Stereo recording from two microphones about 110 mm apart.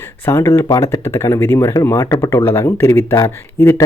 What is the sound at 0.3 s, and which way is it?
Speech, 25° left (ahead or behind).